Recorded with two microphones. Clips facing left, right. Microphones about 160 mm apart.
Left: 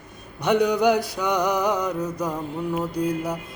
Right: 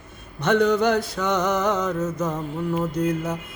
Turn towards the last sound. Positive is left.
turn(degrees=15)  # may be behind; listen again after turning